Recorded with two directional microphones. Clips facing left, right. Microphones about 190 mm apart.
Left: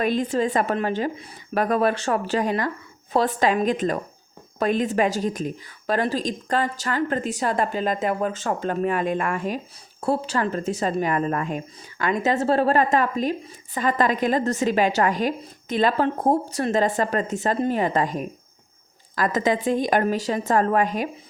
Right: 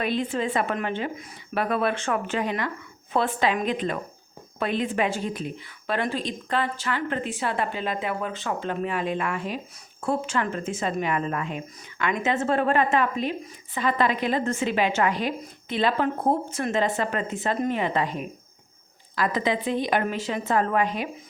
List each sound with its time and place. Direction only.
0.0 s a woman's voice: 45° left (ahead or behind)
10.0 s a woman's voice: 35° left (ahead or behind)